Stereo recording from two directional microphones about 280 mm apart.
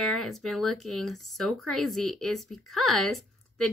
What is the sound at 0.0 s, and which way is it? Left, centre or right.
Speech, centre.